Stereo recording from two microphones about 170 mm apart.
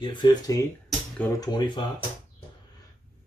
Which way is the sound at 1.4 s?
25° left (ahead or behind).